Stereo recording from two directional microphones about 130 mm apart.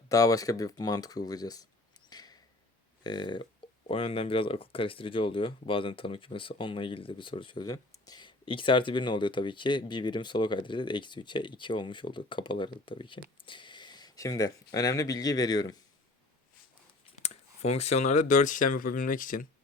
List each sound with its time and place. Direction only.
0.1 s speech: 25° left (ahead or behind)
2.0 s a sound: 30° left (ahead or behind)
3.0 s speech: 35° left (ahead or behind)
17.2 s speech: 55° left (ahead or behind); by 19.5 s 90° left